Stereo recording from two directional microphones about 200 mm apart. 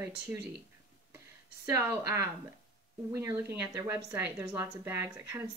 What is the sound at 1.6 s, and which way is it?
A woman's voice, 15° right (ahead or behind).